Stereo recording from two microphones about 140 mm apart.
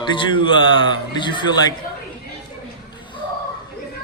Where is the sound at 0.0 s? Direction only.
35° left (ahead or behind).